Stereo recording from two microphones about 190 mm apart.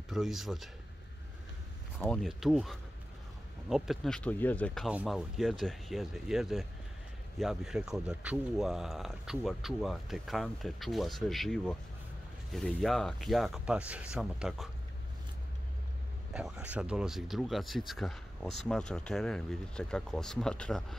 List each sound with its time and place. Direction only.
0.1 s speech: centre (ahead or behind)
2.0 s speech: centre (ahead or behind)
16.3 s speech: 5° right (ahead or behind)